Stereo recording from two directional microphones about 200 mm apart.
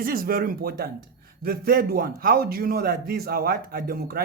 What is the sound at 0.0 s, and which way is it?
A man's voice, 45° right (ahead or behind).